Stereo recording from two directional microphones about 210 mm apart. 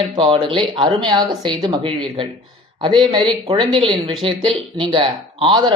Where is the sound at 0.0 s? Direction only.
25° right (ahead or behind).